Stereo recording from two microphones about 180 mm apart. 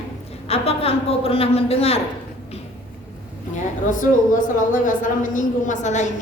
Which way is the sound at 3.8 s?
45° left (ahead or behind).